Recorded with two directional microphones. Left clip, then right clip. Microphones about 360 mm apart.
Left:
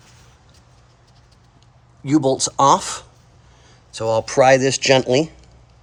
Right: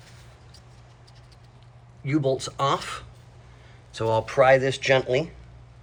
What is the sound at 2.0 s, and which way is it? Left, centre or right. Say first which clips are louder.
Speech: left 7 dB; centre.